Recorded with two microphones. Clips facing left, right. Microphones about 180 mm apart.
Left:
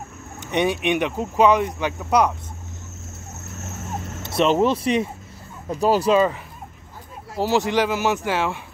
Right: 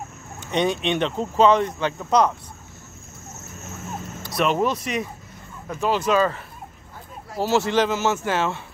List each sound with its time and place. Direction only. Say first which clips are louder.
0.4 s speech: left 1 dB; 15° left (ahead or behind)
4.2 s speech: left 3 dB; 25° left (ahead or behind)
7.3 s speech: even; 15° left (ahead or behind)